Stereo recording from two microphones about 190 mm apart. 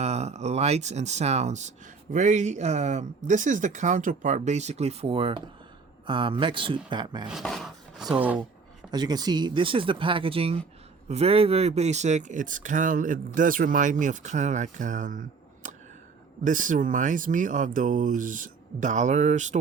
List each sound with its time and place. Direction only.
0.0 s speech: 35° right (ahead or behind)
7.3 s chopping: centre (ahead or behind)
8.9 s speech: 20° right (ahead or behind); by 19.5 s 40° right (ahead or behind)